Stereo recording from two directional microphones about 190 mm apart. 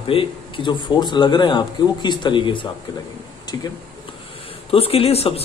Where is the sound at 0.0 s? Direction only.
30° left (ahead or behind).